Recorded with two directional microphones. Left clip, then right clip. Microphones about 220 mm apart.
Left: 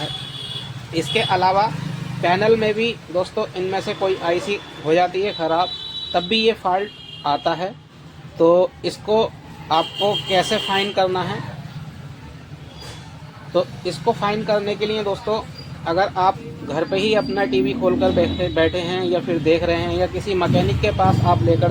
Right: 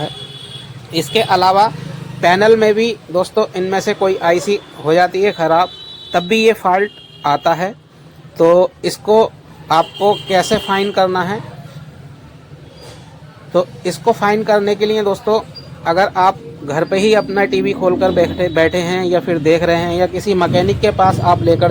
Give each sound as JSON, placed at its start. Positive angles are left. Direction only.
{"t": 0.9, "sound": "speech", "side_deg": -35}
{"t": 13.5, "sound": "speech", "side_deg": -40}